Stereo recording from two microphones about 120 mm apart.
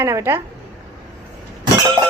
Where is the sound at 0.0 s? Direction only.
20° right (ahead or behind).